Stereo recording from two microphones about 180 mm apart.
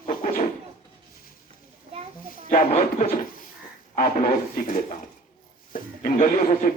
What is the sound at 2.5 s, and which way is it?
Speech, 50° left (ahead or behind).